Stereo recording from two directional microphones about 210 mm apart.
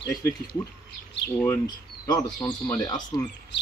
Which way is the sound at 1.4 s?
15° left (ahead or behind).